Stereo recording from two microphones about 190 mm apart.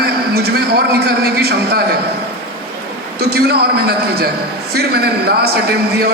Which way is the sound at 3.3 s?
55° right (ahead or behind).